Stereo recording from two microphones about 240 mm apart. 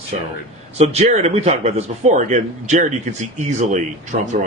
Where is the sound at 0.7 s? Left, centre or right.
Right.